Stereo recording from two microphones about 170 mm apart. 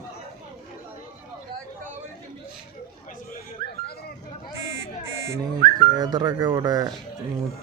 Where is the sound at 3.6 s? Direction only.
65° right (ahead or behind).